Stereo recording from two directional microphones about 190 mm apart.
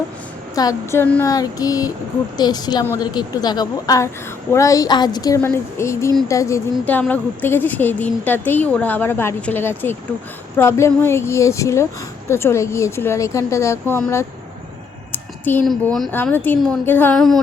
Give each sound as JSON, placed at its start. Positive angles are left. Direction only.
{"t": 0.5, "sound": "speech", "side_deg": 20}